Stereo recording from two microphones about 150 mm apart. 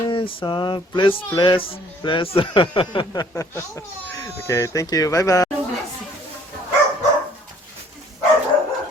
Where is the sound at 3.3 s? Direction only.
20° left (ahead or behind).